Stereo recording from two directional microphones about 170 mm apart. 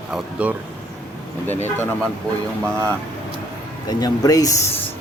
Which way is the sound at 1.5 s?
15° left (ahead or behind).